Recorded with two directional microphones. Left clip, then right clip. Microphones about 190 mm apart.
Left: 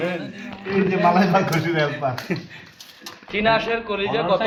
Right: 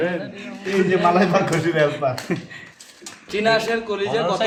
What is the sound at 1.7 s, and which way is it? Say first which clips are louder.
A man's voice: right 3 dB; 20° right (ahead or behind).